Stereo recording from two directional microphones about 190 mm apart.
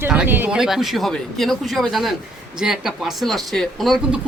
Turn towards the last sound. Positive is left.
turn(degrees=0)  # may be behind; listen again after turning